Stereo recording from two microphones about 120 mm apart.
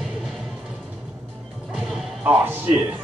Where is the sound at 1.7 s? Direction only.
Centre (ahead or behind).